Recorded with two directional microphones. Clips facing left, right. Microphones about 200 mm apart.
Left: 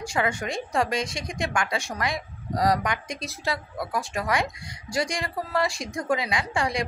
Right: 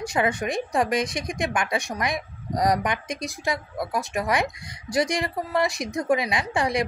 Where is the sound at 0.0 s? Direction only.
20° right (ahead or behind).